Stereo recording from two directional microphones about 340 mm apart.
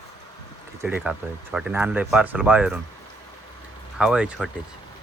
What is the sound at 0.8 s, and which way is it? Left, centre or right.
Speech, centre.